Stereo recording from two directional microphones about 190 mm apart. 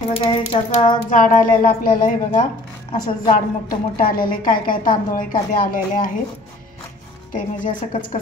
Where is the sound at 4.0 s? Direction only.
50° left (ahead or behind).